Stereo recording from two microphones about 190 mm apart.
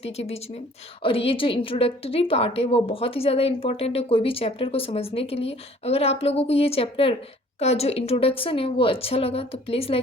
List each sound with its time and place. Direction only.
0.0 s a woman's voice: 35° left (ahead or behind)